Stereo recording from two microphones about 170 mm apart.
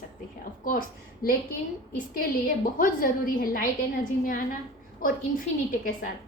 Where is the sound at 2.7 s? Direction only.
55° left (ahead or behind).